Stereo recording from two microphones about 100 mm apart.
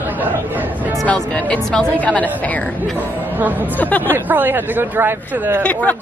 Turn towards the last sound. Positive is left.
turn(degrees=15)  # may be behind; listen again after turning